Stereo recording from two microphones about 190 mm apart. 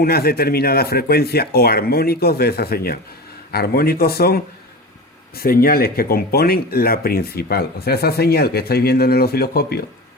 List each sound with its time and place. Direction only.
0.0 s a man's voice: 55° left (ahead or behind)